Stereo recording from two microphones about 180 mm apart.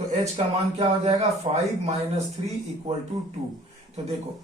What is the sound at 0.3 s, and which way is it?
Speech, 35° right (ahead or behind).